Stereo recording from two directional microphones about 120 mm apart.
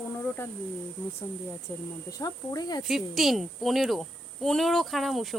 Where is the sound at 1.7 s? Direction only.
25° left (ahead or behind).